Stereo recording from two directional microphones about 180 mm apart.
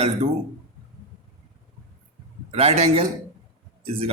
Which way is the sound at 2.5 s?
35° right (ahead or behind).